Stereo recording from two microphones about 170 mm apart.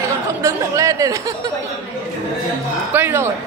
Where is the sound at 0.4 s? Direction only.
15° right (ahead or behind).